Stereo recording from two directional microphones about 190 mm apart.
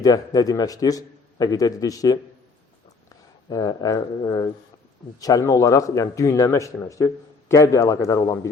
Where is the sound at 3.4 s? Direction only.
20° left (ahead or behind).